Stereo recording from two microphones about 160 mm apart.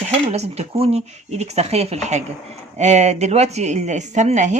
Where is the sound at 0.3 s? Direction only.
40° right (ahead or behind).